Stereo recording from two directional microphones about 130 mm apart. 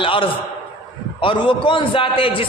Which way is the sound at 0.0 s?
40° left (ahead or behind).